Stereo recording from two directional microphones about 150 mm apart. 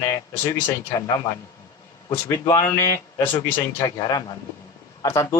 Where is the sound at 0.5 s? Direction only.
25° left (ahead or behind).